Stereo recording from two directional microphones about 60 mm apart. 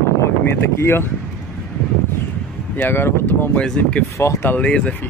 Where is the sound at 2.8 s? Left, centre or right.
Left.